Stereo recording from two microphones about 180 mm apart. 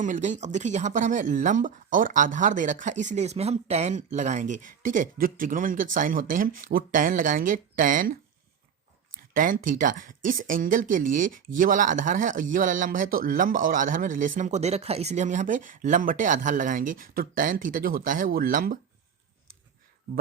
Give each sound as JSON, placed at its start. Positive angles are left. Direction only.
{"t": 0.0, "sound": "speech", "side_deg": -40}
{"t": 9.3, "sound": "speech", "side_deg": -45}